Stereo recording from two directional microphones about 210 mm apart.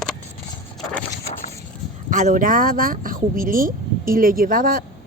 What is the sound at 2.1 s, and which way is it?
Speech, 40° right (ahead or behind).